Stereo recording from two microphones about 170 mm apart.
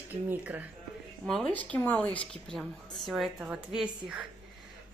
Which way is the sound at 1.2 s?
5° left (ahead or behind).